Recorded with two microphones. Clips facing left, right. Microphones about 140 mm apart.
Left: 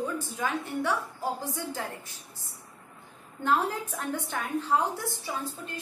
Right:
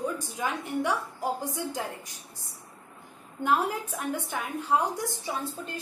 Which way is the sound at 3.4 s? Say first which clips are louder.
Right 1 dB; 10° right (ahead or behind).